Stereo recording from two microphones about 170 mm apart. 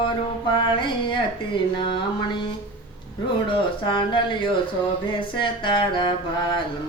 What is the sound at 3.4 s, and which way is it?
Speech, 30° left (ahead or behind).